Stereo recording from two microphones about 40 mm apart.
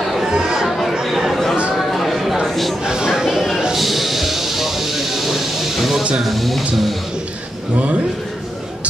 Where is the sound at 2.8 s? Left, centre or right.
Centre.